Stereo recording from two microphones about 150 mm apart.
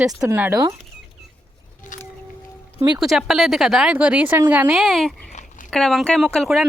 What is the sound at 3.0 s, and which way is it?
A woman's voice, centre (ahead or behind).